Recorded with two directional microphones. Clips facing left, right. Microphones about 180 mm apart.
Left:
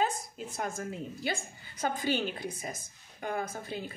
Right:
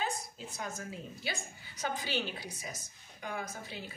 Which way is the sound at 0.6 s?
50° left (ahead or behind).